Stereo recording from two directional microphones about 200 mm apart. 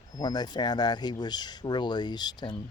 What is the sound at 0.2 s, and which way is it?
Speech, 20° left (ahead or behind).